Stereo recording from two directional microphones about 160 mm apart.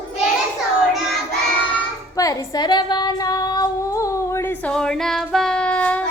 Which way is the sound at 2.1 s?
25° left (ahead or behind).